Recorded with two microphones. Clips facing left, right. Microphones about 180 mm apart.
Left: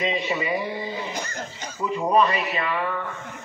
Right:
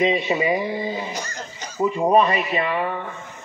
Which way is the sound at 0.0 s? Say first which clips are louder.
Right 5 dB; 20° right (ahead or behind).